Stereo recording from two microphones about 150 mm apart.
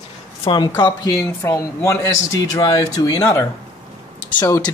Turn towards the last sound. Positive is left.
turn(degrees=20)  # may be behind; listen again after turning